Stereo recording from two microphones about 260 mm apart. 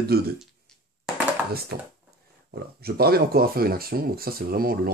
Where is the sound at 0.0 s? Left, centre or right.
Right.